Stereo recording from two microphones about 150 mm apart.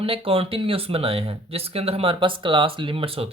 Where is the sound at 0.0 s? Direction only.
40° right (ahead or behind).